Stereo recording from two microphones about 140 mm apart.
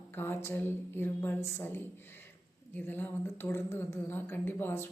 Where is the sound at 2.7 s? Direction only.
15° left (ahead or behind).